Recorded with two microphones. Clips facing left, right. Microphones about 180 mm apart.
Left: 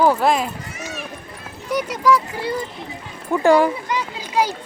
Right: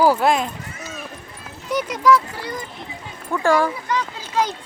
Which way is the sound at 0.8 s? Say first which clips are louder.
Left 4 dB; 75° left (ahead or behind).